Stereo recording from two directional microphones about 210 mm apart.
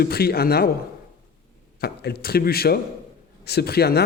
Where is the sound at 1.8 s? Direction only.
50° left (ahead or behind).